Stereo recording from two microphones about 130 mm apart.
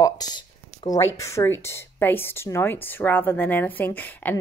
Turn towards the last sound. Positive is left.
turn(degrees=15)  # may be behind; listen again after turning